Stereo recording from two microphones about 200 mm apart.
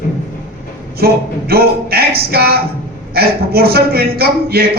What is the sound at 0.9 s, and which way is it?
A woman's voice, 50° right (ahead or behind).